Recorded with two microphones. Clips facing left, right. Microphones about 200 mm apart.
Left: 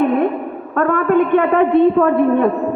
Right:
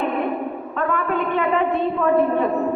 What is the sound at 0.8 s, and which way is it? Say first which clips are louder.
A woman's voice: left 9 dB; 60° left (ahead or behind).